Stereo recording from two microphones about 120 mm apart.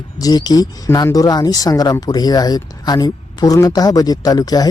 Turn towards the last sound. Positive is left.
turn(degrees=30)  # may be behind; listen again after turning